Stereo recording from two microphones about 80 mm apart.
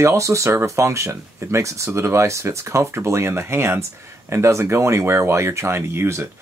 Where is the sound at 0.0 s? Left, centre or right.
Right.